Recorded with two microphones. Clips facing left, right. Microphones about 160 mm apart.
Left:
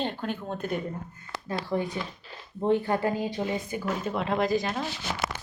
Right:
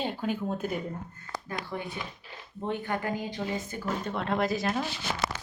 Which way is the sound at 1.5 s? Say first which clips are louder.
Left 8 dB; 30° left (ahead or behind).